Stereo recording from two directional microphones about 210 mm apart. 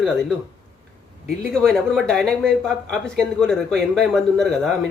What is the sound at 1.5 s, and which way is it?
Speech, 5° left (ahead or behind).